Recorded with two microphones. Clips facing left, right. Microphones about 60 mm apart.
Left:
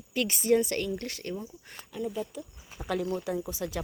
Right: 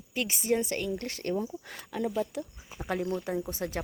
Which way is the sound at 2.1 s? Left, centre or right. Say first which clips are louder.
Right 5 dB; right.